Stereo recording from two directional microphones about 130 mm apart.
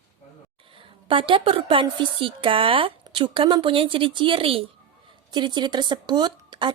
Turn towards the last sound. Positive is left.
turn(degrees=-35)  # may be behind; listen again after turning